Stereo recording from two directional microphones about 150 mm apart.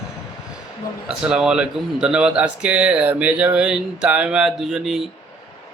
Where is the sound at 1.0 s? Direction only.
5° right (ahead or behind).